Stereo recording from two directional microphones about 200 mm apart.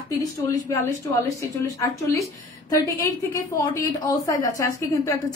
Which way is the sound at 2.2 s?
15° left (ahead or behind).